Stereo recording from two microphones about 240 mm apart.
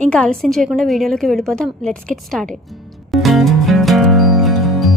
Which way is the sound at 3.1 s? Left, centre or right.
Centre.